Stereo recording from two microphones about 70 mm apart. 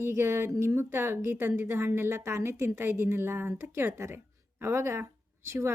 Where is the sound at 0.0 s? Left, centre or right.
Right.